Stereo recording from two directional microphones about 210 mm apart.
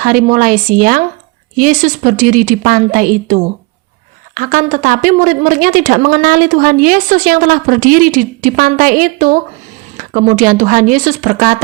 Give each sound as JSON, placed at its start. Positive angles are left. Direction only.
{"t": 0.0, "sound": "a woman's voice", "side_deg": -40}